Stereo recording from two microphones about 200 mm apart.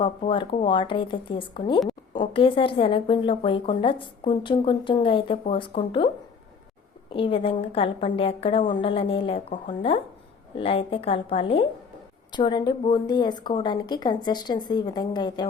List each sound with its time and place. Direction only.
0.0 s speech: 25° left (ahead or behind)
7.1 s speech: 25° left (ahead or behind)